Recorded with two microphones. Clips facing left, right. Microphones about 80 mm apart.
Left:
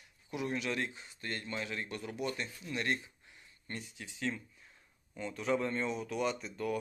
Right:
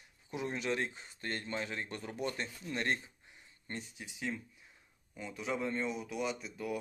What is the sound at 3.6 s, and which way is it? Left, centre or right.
Speech, right.